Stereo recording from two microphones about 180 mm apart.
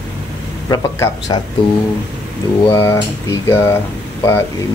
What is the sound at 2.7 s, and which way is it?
Speech, 15° left (ahead or behind).